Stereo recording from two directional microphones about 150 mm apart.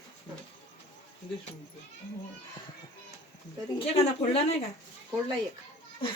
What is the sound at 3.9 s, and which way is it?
Speech, 45° left (ahead or behind).